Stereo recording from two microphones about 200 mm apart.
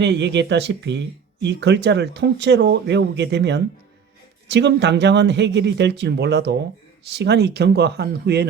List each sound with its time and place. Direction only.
0.0 s speech: 60° right (ahead or behind)